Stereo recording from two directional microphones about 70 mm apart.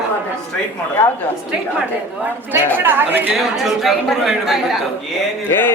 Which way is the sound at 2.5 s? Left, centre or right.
Right.